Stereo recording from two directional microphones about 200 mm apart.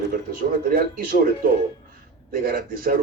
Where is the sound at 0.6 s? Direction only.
45° right (ahead or behind).